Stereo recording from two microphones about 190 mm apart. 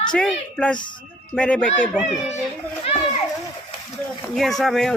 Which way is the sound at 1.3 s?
5° left (ahead or behind).